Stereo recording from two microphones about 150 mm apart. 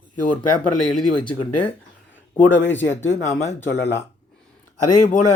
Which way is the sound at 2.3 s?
10° left (ahead or behind).